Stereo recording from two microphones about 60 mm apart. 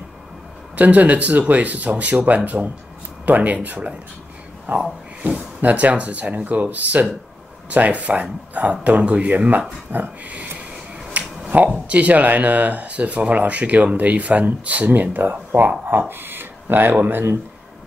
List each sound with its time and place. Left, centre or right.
0.7 s speech: right
11.1 s a sound: right
11.5 s speech: right